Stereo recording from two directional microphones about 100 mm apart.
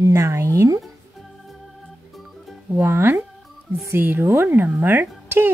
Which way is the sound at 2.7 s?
25° right (ahead or behind).